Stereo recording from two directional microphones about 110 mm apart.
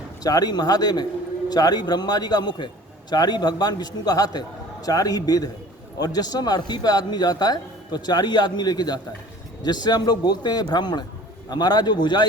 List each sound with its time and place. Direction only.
0.2 s speech: 35° left (ahead or behind)